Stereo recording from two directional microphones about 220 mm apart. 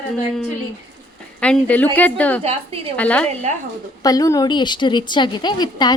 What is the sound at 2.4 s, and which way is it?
Speech, 25° right (ahead or behind).